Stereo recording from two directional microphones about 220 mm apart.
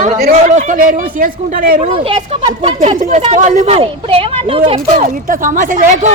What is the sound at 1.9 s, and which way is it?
Speech, 25° right (ahead or behind).